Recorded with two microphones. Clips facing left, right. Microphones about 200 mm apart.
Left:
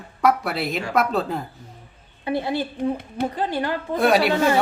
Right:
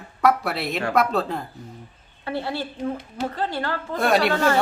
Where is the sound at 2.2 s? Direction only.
15° left (ahead or behind).